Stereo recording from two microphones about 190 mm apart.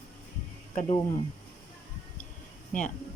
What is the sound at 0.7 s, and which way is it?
Speech, 40° left (ahead or behind).